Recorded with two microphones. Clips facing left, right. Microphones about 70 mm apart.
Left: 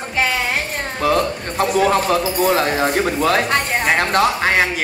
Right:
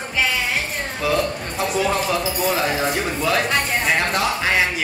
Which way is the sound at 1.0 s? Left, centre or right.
Left.